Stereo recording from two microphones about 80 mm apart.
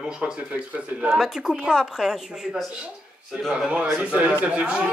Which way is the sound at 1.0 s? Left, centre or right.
Centre.